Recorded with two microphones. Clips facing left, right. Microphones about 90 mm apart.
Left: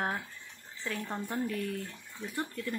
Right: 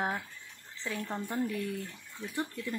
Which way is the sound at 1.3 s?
10° right (ahead or behind).